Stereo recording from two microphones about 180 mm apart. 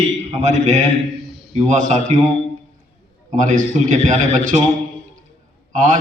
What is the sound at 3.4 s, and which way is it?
A man's voice, 45° right (ahead or behind).